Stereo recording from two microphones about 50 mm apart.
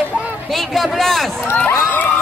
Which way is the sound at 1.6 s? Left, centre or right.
Left.